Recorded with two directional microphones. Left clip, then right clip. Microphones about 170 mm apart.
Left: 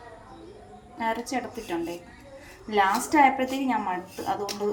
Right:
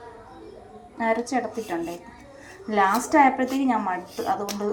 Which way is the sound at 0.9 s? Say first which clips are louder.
Right 4 dB; 15° right (ahead or behind).